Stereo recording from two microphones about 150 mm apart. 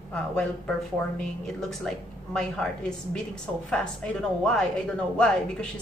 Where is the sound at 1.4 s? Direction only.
5° left (ahead or behind).